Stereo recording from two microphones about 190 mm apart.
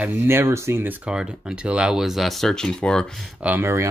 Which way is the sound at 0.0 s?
10° right (ahead or behind).